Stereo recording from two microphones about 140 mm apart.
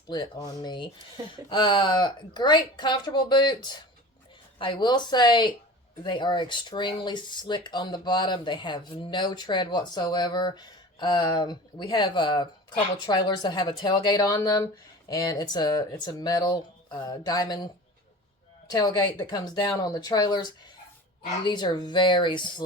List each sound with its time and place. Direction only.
0.1 s speech: 30° left (ahead or behind)
18.7 s speech: 30° left (ahead or behind)